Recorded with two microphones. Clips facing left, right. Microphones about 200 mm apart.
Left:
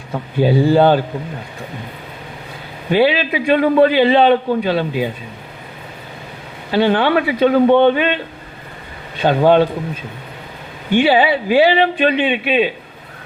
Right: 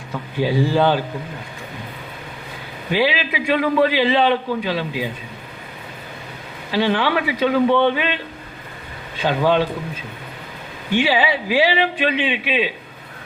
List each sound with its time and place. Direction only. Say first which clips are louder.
0.4 s a man's voice: left 5 dB; 50° left (ahead or behind)
2.9 s a man's voice: left 6 dB; 50° left (ahead or behind)
6.7 s a man's voice: left 5 dB; 50° left (ahead or behind)
9.2 s a man's voice: left 6 dB; 50° left (ahead or behind)
10.9 s a man's voice: left 5 dB; 50° left (ahead or behind)